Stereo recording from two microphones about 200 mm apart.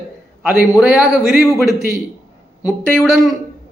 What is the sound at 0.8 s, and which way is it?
Speech, 5° right (ahead or behind).